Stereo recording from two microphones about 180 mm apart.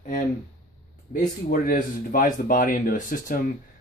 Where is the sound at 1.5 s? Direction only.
50° left (ahead or behind).